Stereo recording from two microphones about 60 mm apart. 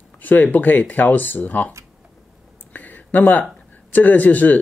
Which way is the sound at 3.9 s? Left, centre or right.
Left.